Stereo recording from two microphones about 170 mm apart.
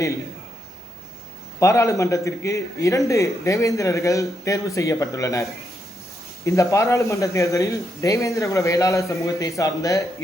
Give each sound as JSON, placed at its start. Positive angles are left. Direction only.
{"t": 1.5, "sound": "a man's voice", "side_deg": 20}